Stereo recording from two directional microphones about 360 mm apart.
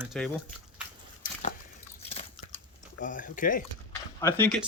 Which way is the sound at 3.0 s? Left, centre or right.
Left.